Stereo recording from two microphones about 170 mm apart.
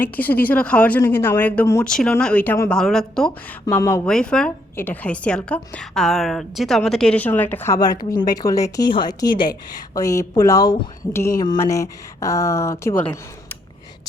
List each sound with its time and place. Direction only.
0.0 s a woman's voice: 10° left (ahead or behind)